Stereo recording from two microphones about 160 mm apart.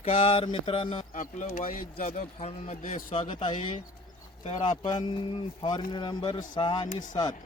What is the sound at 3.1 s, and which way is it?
A man's voice, 30° left (ahead or behind).